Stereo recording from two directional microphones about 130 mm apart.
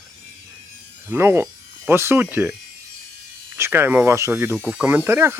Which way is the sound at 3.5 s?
20° right (ahead or behind).